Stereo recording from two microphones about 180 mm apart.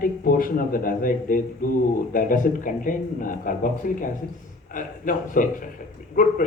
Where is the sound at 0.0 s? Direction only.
50° left (ahead or behind).